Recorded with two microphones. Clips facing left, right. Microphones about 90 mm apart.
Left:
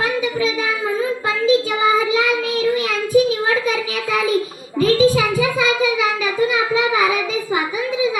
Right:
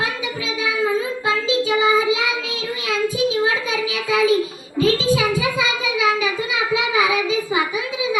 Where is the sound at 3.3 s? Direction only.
50° left (ahead or behind).